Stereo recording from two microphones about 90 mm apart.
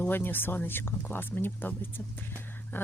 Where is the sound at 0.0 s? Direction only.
20° left (ahead or behind).